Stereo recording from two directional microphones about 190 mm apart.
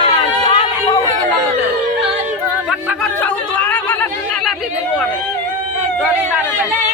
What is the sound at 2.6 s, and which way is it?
Chatter, 5° left (ahead or behind).